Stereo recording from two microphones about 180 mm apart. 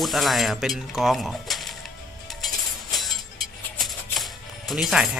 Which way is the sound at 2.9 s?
Centre (ahead or behind).